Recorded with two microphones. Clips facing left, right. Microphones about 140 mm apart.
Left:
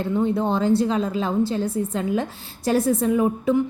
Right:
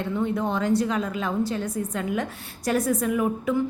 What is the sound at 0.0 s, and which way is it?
Speech, 30° left (ahead or behind).